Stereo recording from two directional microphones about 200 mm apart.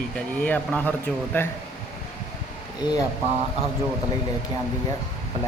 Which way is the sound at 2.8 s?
20° left (ahead or behind).